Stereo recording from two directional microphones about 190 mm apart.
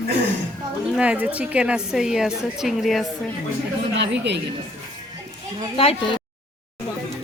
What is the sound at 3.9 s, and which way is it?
Speech, 65° right (ahead or behind).